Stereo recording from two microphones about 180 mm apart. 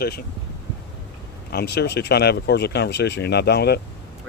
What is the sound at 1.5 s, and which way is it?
Speech, 65° left (ahead or behind).